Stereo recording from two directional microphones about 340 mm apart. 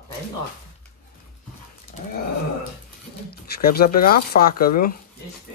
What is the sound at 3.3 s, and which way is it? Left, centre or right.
Speech, left.